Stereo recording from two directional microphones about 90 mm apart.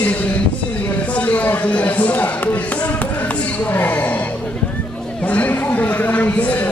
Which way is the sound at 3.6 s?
20° left (ahead or behind).